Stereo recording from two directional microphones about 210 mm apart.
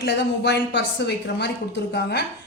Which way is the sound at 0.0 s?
55° left (ahead or behind).